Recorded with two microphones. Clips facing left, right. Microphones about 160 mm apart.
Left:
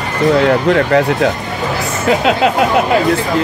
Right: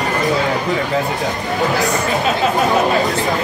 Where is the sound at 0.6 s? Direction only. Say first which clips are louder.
Left 7 dB; 70° left (ahead or behind).